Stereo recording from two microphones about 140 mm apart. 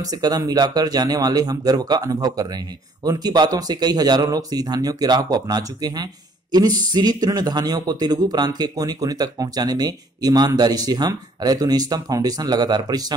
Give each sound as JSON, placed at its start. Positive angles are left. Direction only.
{"t": 0.0, "sound": "speech", "side_deg": -30}